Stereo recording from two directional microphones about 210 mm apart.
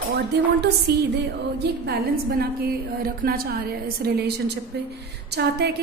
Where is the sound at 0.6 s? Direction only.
50° right (ahead or behind).